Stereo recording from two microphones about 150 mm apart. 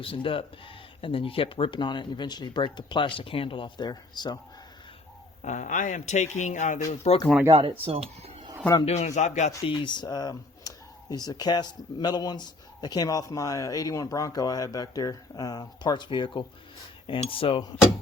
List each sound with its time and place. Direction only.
0.0 s speech: 35° left (ahead or behind)
5.4 s speech: 55° left (ahead or behind)
7.5 s speech: 40° right (ahead or behind)
8.8 s speech: 45° left (ahead or behind)
9.6 s speech: 30° left (ahead or behind)